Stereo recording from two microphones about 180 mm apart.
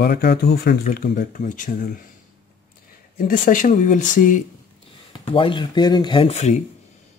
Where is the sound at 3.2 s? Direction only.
50° left (ahead or behind).